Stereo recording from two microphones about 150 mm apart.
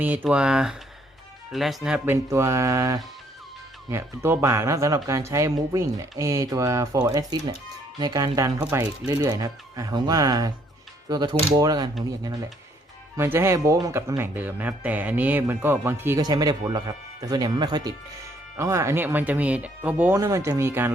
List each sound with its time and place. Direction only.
0.0 s speech: 10° right (ahead or behind)
2.3 s speech: 20° right (ahead or behind)
20.1 s speech: 20° right (ahead or behind)